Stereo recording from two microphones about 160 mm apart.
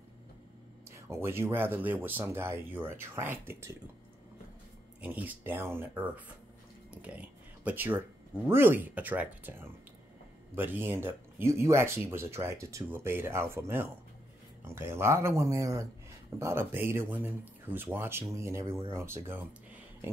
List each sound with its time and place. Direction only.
0.8 s speech: 15° right (ahead or behind)
5.0 s speech: 10° right (ahead or behind)